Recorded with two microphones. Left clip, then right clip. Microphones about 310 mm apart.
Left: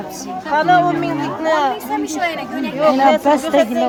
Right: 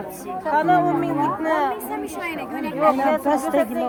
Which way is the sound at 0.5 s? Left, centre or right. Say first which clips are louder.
Left 5 dB; left.